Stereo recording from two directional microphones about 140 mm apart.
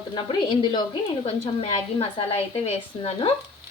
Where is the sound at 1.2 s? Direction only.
45° left (ahead or behind).